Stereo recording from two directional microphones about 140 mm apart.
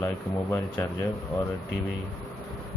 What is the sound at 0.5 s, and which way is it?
Speech, 20° left (ahead or behind).